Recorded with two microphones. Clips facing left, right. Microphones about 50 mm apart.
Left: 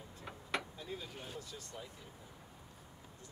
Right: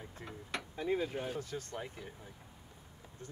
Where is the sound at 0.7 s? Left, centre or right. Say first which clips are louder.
Right 11 dB; right.